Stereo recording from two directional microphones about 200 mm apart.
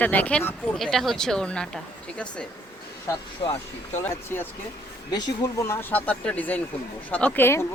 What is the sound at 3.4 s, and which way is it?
Speech, 30° left (ahead or behind).